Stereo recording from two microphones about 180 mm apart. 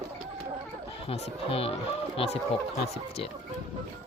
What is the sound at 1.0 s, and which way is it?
Speech, 30° left (ahead or behind).